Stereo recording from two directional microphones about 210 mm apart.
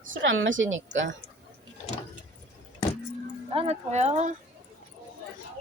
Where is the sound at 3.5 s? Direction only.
30° right (ahead or behind).